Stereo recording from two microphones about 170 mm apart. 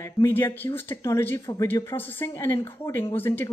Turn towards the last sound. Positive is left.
turn(degrees=10)  # may be behind; listen again after turning